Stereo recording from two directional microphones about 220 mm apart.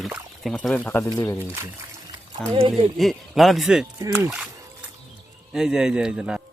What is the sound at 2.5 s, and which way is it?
Speech, 25° right (ahead or behind).